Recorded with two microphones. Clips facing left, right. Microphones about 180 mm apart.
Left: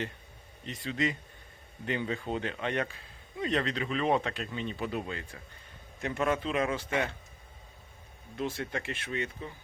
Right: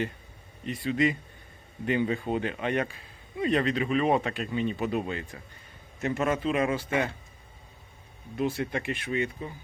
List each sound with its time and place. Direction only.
0.6 s speech: 10° right (ahead or behind)
6.0 s a man's voice: 5° right (ahead or behind)
8.4 s speech: 15° right (ahead or behind)